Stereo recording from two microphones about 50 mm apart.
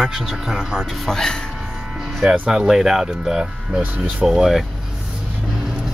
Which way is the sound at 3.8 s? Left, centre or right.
Right.